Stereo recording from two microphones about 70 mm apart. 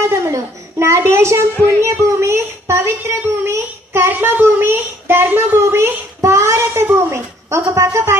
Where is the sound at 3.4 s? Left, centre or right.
Right.